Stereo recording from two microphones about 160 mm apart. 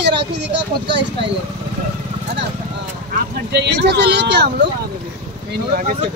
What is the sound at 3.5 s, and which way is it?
Speech, 90° right.